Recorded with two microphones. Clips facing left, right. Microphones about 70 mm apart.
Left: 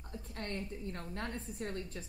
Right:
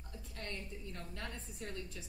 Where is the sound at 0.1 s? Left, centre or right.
Left.